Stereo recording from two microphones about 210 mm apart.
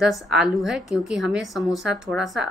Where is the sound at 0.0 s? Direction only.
Centre (ahead or behind).